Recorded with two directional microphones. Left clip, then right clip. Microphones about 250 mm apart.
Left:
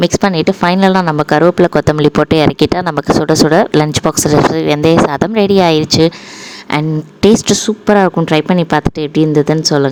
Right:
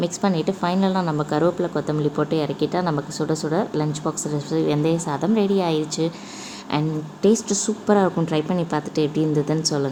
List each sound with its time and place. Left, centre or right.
0.0 s speech: left